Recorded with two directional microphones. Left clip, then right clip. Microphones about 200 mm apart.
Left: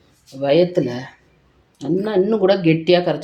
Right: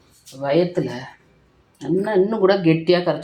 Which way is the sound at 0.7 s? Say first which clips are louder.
Left 4 dB; 35° left (ahead or behind).